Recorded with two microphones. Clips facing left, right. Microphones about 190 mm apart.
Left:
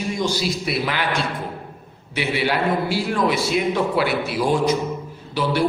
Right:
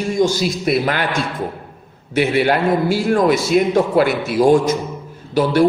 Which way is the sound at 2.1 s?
50° right (ahead or behind).